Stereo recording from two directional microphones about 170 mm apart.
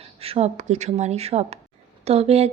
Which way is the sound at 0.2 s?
35° right (ahead or behind).